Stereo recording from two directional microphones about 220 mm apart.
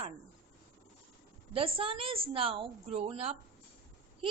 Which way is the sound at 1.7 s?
25° right (ahead or behind).